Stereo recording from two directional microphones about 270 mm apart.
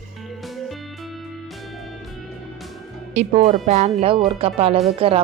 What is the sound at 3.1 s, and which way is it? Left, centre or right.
A woman's voice, right.